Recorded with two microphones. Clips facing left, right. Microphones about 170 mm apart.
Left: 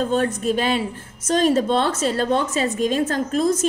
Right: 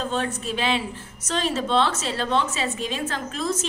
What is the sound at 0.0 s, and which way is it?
A woman's voice, 50° left (ahead or behind).